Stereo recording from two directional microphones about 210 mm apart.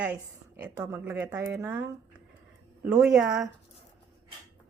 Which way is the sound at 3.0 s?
5° right (ahead or behind).